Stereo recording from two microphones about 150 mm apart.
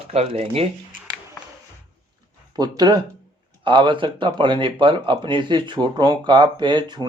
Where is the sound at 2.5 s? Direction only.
25° right (ahead or behind).